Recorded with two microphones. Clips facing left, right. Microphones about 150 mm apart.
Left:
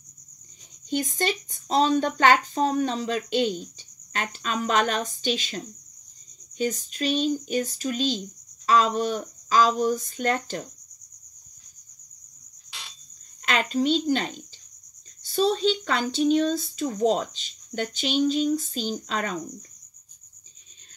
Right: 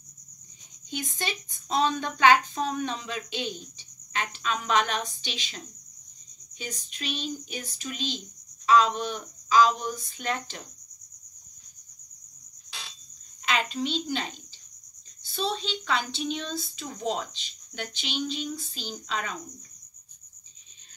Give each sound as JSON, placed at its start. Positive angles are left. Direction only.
{"t": 0.9, "sound": "speech", "side_deg": 45}
{"t": 6.6, "sound": "speech", "side_deg": 45}
{"t": 13.5, "sound": "speech", "side_deg": 45}
{"t": 15.3, "sound": "speech", "side_deg": 45}